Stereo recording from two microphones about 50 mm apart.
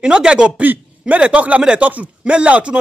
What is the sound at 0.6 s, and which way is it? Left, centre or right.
A man's voice, right.